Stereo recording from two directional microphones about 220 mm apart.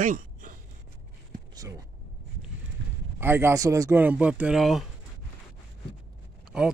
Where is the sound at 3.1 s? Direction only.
10° right (ahead or behind).